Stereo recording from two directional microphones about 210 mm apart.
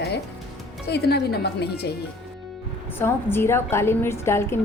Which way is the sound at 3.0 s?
10° left (ahead or behind).